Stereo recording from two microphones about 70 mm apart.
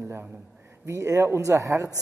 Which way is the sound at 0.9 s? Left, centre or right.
Right.